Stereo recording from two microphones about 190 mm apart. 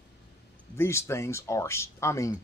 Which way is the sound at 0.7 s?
15° left (ahead or behind).